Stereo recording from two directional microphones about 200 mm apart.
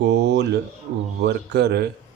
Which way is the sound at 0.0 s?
60° right (ahead or behind).